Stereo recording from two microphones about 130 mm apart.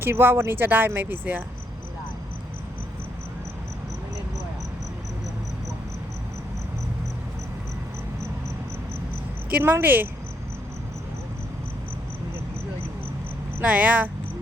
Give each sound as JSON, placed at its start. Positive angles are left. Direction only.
{"t": 0.0, "sound": "speech", "side_deg": -15}
{"t": 9.5, "sound": "speech", "side_deg": -15}
{"t": 13.6, "sound": "speech", "side_deg": -10}